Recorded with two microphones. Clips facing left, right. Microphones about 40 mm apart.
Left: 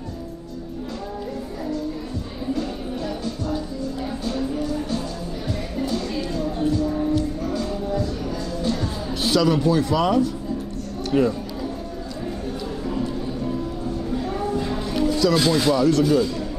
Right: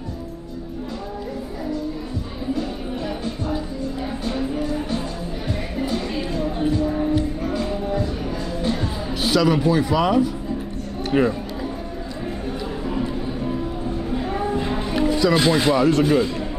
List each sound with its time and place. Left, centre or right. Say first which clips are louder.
4.2 s music: right 1 dB; right
9.2 s speech: right 1 dB; centre
11.1 s speech: right 1 dB; right
12.8 s music: right 1 dB; right